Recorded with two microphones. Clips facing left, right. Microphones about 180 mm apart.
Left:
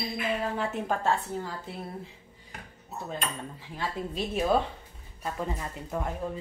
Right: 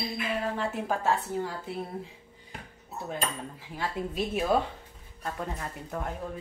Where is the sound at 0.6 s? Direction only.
5° right (ahead or behind).